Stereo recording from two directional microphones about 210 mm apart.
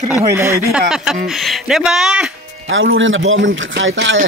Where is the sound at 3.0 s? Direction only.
65° right (ahead or behind).